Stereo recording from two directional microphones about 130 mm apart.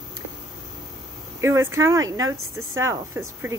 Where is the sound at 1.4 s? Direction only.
20° right (ahead or behind).